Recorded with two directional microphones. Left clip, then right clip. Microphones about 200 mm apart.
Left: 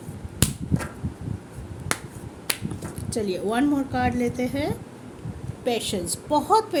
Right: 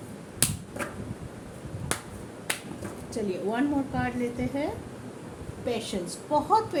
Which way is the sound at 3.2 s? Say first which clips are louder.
Left 5 dB; 50° left (ahead or behind).